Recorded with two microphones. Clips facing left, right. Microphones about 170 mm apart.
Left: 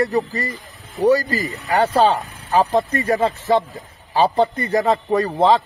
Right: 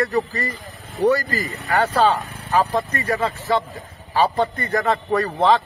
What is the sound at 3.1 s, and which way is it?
Speech, 35° left (ahead or behind).